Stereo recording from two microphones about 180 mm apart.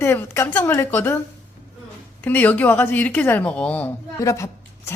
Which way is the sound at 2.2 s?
10° left (ahead or behind).